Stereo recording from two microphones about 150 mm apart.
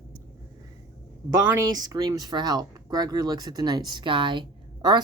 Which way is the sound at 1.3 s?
20° right (ahead or behind).